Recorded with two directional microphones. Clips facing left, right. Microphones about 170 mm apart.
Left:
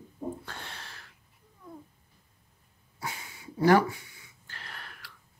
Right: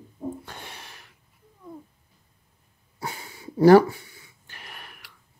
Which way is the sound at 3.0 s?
35° right (ahead or behind).